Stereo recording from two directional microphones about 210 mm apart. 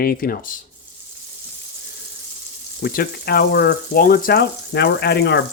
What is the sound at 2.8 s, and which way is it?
Speech, 45° left (ahead or behind).